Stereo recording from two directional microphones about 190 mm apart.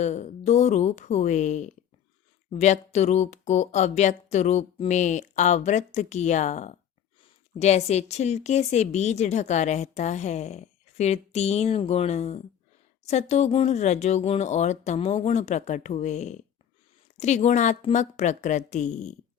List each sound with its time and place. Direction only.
0.0 s speech: 35° left (ahead or behind)